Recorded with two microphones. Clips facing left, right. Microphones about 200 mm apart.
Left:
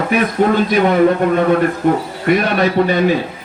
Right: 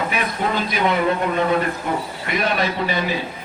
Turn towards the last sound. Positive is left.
turn(degrees=50)  # may be behind; listen again after turning